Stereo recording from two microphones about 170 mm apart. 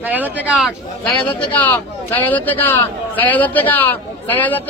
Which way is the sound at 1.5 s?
10° left (ahead or behind).